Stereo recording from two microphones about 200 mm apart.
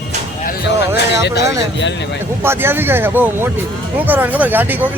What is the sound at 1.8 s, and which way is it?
Speech, 60° left (ahead or behind).